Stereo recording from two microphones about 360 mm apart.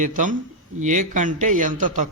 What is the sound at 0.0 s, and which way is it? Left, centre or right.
Speech, right.